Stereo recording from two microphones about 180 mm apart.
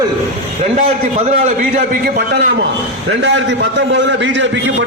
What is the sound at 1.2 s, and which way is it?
A man's voice, 45° right (ahead or behind).